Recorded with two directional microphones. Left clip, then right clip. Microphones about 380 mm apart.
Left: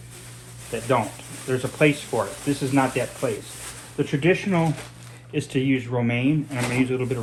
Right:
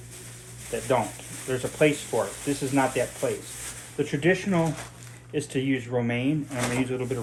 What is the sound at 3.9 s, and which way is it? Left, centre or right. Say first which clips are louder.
Speech: left 2 dB; left.